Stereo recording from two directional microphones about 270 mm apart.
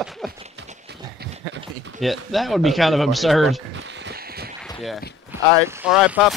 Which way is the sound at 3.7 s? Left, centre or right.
Right.